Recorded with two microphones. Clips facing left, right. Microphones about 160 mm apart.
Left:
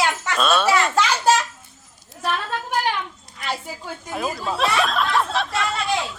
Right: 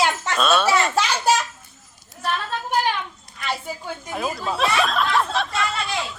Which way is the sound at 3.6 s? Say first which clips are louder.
Right 2 dB; centre (ahead or behind).